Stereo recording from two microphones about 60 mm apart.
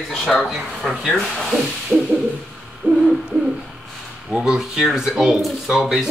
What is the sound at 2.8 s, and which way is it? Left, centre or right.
Hoot, right.